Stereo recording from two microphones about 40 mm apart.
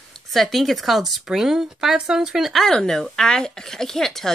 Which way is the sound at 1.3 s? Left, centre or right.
Centre.